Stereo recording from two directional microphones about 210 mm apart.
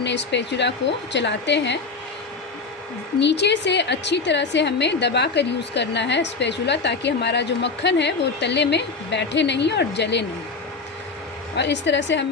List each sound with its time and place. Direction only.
0.0 s a woman's voice: 55° left (ahead or behind)
3.2 s a woman's voice: 55° left (ahead or behind)
11.5 s a woman's voice: 55° left (ahead or behind)